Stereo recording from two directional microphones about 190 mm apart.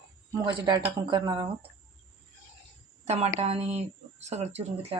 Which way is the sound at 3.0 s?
35° right (ahead or behind).